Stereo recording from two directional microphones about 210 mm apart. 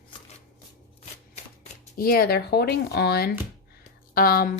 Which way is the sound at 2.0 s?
45° left (ahead or behind).